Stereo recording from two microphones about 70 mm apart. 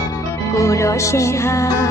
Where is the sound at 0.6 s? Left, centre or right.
Left.